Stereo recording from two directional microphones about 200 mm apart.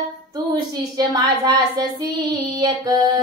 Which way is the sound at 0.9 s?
20° right (ahead or behind).